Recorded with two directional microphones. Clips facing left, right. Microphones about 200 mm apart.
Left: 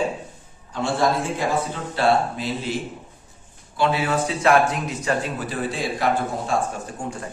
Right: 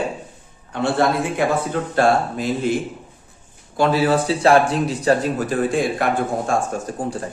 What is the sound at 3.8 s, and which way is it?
Speech, 40° right (ahead or behind).